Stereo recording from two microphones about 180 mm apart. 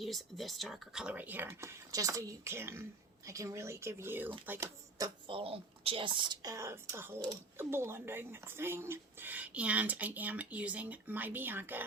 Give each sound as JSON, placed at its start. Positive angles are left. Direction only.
{"t": 0.0, "sound": "speech", "side_deg": 0}